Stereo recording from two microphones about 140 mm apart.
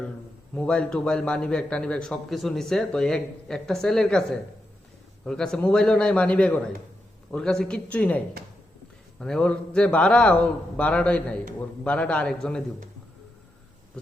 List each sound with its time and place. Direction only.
0.5 s a man's voice: 5° left (ahead or behind)